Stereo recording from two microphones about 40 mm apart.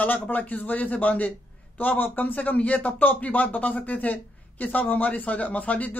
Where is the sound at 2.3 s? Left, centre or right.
Left.